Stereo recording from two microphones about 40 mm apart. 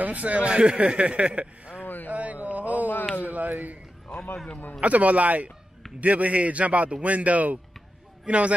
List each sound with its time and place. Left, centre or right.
0.0 s speech: right
2.0 s mantra: right
3.3 s speech: right
4.7 s speech: right